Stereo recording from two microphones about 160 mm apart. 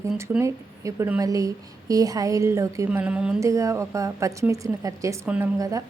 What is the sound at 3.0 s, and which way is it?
Speech, 10° right (ahead or behind).